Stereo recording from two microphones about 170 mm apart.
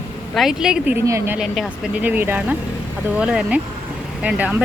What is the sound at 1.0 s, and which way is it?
Speech, 15° right (ahead or behind).